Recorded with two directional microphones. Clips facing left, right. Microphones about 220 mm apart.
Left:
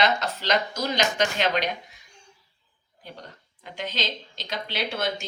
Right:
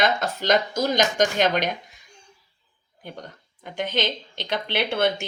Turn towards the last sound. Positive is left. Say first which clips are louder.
# right 6 dB
turn(degrees=-60)  # may be behind; listen again after turning